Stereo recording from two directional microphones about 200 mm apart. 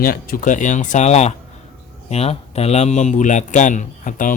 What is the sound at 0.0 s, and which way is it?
Speech, 45° left (ahead or behind).